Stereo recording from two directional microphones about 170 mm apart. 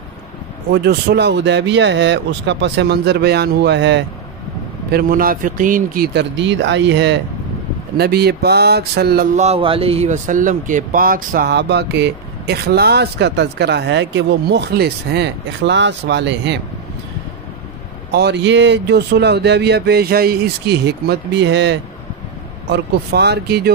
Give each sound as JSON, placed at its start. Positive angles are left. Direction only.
{"t": 0.7, "sound": "speech", "side_deg": -70}
{"t": 4.9, "sound": "a man's voice", "side_deg": -60}
{"t": 6.1, "sound": "speech", "side_deg": -90}
{"t": 8.0, "sound": "speech", "side_deg": -70}
{"t": 9.4, "sound": "speech", "side_deg": -35}
{"t": 18.1, "sound": "speech", "side_deg": -85}
{"t": 22.7, "sound": "speech", "side_deg": -75}